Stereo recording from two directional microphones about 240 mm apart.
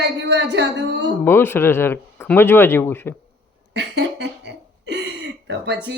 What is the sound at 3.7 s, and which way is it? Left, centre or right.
Speech, right.